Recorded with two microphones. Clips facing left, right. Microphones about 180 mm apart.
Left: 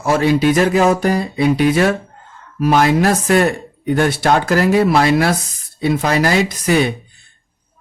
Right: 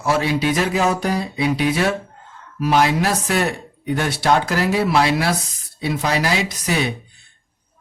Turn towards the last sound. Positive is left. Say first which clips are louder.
# left 6 dB
turn(degrees=50)  # may be behind; listen again after turning